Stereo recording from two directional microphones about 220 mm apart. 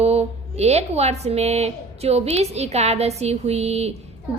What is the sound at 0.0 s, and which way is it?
A woman's voice, 30° right (ahead or behind).